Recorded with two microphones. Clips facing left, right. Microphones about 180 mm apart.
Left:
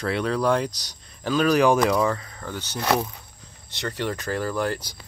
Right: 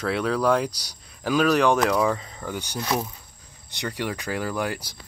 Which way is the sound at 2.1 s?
15° right (ahead or behind).